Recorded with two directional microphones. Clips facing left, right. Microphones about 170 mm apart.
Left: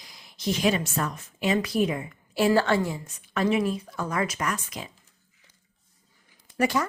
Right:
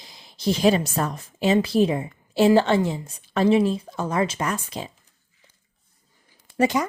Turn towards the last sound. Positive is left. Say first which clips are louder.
# right 4 dB
turn(degrees=-20)  # may be behind; listen again after turning